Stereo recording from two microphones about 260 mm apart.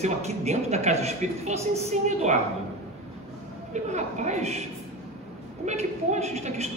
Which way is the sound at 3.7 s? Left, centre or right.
Right.